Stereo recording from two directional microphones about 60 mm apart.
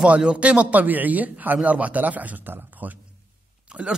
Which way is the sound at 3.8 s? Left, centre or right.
Centre.